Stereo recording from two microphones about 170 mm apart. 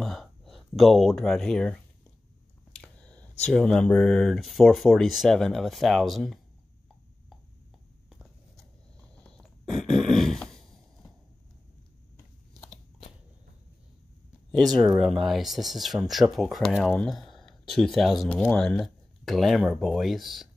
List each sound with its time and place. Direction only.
0.0 s speech: centre (ahead or behind)
9.1 s a sound: 5° left (ahead or behind)
14.5 s speech: centre (ahead or behind)